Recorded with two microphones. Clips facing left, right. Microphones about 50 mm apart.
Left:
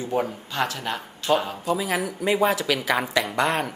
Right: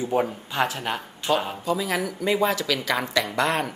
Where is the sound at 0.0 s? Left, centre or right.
Centre.